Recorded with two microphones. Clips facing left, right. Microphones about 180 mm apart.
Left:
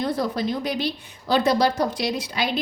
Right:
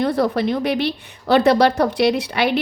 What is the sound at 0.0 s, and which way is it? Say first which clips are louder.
A woman's voice: right 6 dB; 65° right (ahead or behind).